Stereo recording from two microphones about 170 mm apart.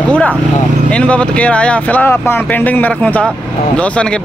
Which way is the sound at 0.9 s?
5° left (ahead or behind).